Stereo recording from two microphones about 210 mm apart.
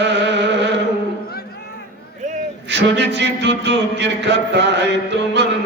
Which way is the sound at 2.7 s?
55° right (ahead or behind).